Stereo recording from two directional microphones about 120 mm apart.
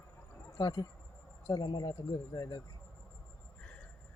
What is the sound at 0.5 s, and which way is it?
Speech, 35° left (ahead or behind).